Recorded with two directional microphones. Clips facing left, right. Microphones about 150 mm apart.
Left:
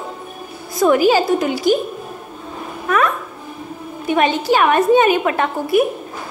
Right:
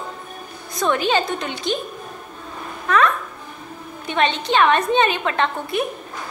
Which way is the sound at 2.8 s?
20° left (ahead or behind).